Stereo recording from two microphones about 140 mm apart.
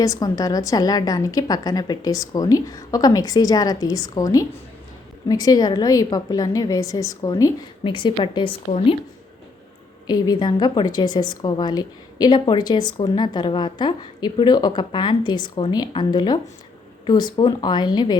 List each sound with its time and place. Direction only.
0.0 s a woman's voice: 25° left (ahead or behind)
7.9 s a woman's voice: 35° left (ahead or behind)
10.1 s a woman's voice: 30° left (ahead or behind)